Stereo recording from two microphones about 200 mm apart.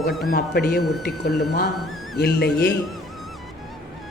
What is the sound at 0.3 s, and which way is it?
Speech, 50° left (ahead or behind).